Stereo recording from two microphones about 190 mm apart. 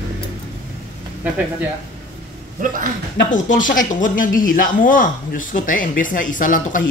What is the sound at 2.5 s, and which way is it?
Speech, 45° right (ahead or behind).